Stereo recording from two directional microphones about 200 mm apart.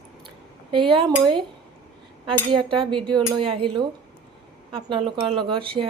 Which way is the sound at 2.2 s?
25° right (ahead or behind).